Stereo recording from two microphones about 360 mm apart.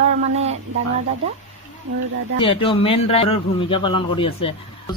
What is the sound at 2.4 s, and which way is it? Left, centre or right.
A man's voice, centre.